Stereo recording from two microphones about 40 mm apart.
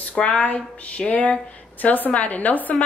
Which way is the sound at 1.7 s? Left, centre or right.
Left.